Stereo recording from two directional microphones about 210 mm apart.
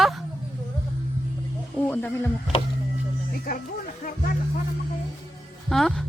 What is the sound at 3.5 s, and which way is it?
Speech, 45° left (ahead or behind).